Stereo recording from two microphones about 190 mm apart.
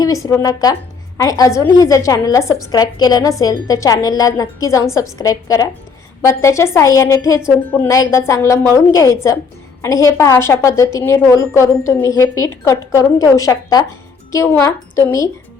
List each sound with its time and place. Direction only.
0.0 s a woman's voice: 15° left (ahead or behind)